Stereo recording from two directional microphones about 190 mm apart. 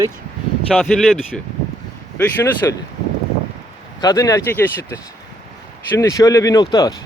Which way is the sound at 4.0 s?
20° left (ahead or behind).